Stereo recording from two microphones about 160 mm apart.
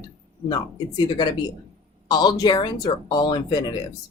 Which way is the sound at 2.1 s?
25° left (ahead or behind).